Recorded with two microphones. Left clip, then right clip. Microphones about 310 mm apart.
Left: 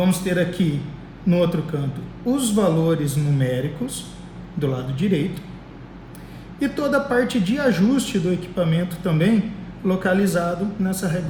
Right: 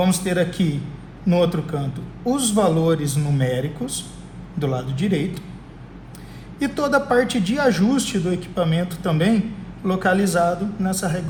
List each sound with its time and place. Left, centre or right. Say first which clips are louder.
0.0 s a woman's voice: right 1 dB; centre
6.6 s a woman's voice: right 1 dB; centre